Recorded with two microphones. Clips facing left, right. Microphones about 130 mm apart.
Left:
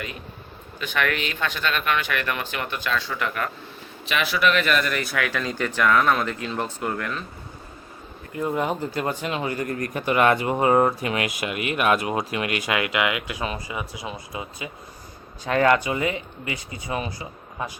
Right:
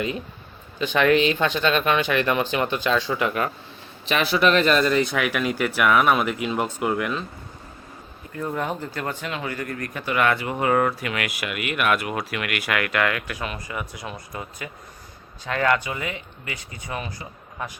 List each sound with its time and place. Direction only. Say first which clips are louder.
0.8 s speech: right 7 dB; 25° right (ahead or behind)
4.1 s speech: right 3 dB; 30° right (ahead or behind); by 7.3 s 15° right (ahead or behind)
8.4 s speech: left 3 dB; 15° left (ahead or behind)
9.6 s speech: left 4 dB; 35° left (ahead or behind)
10.0 s speech: left 3 dB; 25° left (ahead or behind)